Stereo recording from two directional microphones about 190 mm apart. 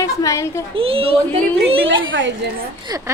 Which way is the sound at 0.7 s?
30° right (ahead or behind).